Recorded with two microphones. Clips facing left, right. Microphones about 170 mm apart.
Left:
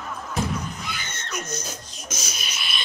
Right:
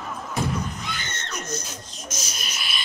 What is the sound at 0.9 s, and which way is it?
Screaming, 5° left (ahead or behind).